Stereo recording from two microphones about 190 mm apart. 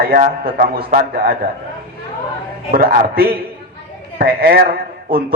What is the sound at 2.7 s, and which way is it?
A man's voice, 50° right (ahead or behind).